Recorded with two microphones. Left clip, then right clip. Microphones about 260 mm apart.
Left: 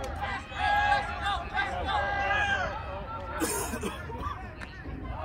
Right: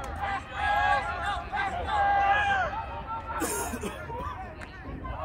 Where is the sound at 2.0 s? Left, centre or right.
Right.